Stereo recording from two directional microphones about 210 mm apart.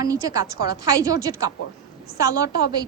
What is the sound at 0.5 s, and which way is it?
Speech, 50° left (ahead or behind).